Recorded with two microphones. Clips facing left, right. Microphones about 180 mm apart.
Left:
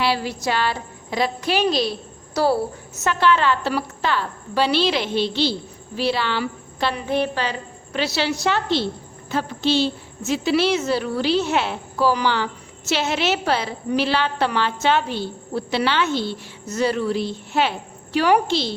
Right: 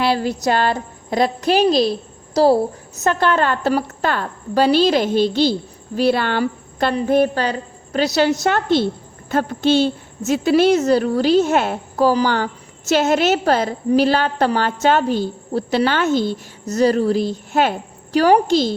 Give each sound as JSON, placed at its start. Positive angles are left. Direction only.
{"t": 0.0, "sound": "a woman's voice", "side_deg": -45}